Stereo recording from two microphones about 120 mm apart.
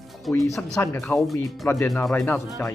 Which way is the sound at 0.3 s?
5° left (ahead or behind).